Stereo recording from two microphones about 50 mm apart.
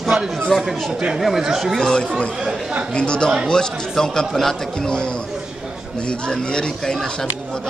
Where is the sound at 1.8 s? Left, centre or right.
Centre.